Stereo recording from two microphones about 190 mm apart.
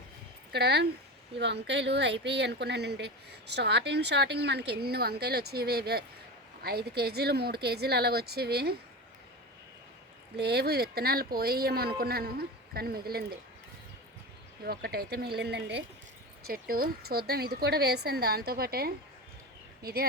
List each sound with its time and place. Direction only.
0.5 s speech: 60° right (ahead or behind)
10.3 s speech: 60° right (ahead or behind)
14.6 s speech: 55° right (ahead or behind)
16.5 s speech: 50° right (ahead or behind)